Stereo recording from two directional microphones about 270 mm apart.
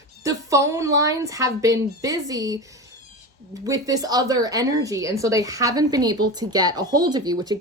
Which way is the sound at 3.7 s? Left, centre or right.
Centre.